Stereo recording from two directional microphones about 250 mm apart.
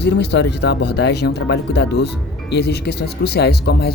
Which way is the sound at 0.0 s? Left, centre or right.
Left.